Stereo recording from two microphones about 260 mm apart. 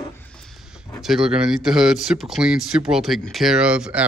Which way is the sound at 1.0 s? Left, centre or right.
Centre.